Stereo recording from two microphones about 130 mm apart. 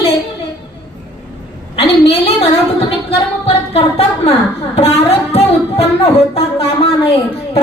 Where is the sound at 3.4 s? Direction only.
50° left (ahead or behind).